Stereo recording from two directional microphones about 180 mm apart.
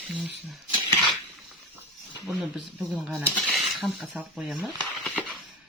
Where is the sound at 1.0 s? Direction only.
Centre (ahead or behind).